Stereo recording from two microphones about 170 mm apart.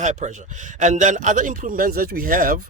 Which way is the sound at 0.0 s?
45° right (ahead or behind).